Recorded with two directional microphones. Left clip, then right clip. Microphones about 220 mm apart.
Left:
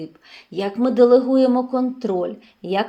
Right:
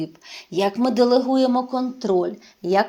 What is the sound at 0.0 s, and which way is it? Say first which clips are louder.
A woman's voice: right 4 dB; 30° right (ahead or behind).